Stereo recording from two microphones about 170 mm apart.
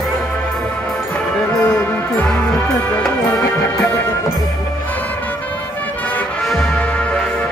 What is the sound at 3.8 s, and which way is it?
Music, 20° left (ahead or behind).